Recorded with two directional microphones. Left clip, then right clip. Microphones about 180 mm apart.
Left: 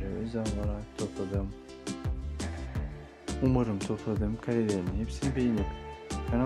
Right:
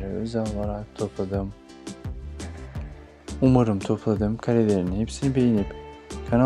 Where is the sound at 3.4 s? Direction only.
40° right (ahead or behind).